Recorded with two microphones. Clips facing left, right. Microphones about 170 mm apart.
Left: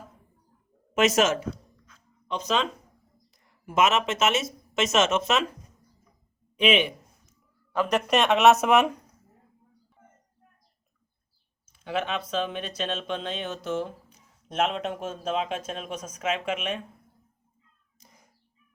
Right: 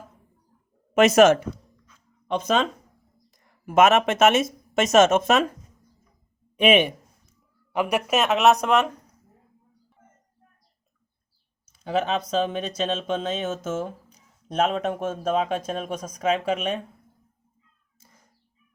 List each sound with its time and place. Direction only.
0.9 s speech: 55° right (ahead or behind)
6.6 s speech: 50° right (ahead or behind)
7.7 s speech: 10° right (ahead or behind); by 8.9 s 5° left (ahead or behind)
11.8 s speech: 40° right (ahead or behind)
18.0 s cat: 15° left (ahead or behind)